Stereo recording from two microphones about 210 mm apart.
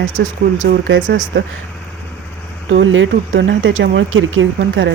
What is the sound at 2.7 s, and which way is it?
Speech, 65° right (ahead or behind).